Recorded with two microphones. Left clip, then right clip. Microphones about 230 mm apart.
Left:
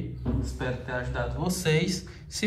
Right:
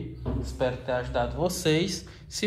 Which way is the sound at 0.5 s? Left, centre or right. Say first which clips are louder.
Right 7 dB; right.